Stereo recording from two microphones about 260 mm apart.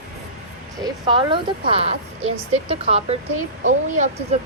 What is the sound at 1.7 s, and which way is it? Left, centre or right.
Speech, right.